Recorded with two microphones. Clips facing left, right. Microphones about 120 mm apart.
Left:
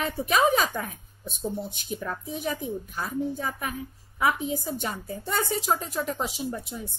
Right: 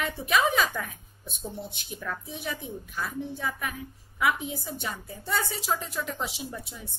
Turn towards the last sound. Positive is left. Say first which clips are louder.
# left 4 dB
turn(degrees=40)  # may be behind; listen again after turning